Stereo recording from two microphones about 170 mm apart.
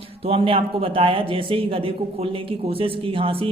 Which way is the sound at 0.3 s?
35° right (ahead or behind).